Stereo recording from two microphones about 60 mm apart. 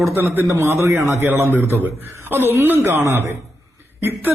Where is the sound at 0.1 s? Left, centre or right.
Right.